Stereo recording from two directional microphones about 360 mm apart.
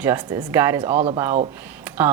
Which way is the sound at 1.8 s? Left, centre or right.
Centre.